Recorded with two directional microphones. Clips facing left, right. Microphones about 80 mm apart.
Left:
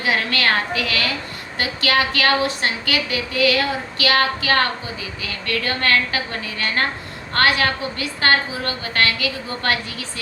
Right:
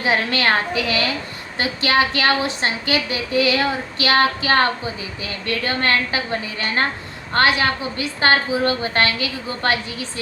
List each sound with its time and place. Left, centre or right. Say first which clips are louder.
0.0 s a woman's voice: right 1 dB; right